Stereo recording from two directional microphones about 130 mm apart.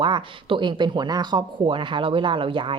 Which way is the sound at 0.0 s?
40° right (ahead or behind).